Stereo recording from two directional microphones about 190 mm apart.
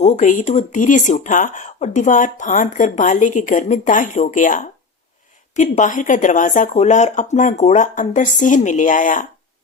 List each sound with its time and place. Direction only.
0.0 s speech: 40° left (ahead or behind)